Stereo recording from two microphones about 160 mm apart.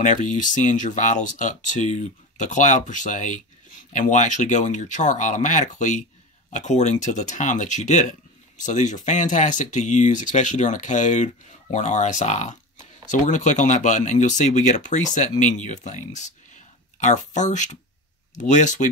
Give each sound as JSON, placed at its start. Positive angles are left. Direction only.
{"t": 0.0, "sound": "speech", "side_deg": 50}
{"t": 17.0, "sound": "speech", "side_deg": 50}